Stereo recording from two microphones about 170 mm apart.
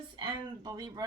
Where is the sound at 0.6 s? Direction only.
25° right (ahead or behind).